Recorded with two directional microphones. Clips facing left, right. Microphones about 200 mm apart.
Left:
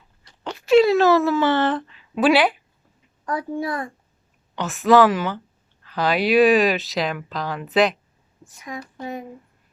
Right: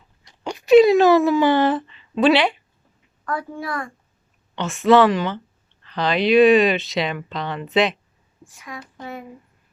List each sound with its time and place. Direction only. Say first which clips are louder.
0.3 s a sound: right 4 dB; 15° right (ahead or behind)
1.9 s speech: right 1 dB; 5° left (ahead or behind)
3.2 s a child's voice: left 2 dB; 20° left (ahead or behind)
4.5 s speech: right 1 dB; centre (ahead or behind)
8.4 s a child's voice: left 3 dB; 20° left (ahead or behind)
9.0 s a sound: left 3 dB; 15° left (ahead or behind)